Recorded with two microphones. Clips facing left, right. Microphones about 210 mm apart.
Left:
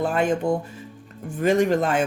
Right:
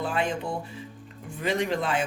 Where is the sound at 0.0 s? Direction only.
45° left (ahead or behind).